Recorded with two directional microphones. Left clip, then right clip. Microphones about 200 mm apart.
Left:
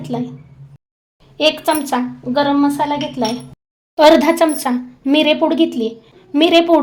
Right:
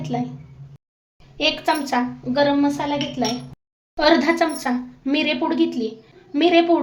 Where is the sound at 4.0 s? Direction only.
45° left (ahead or behind).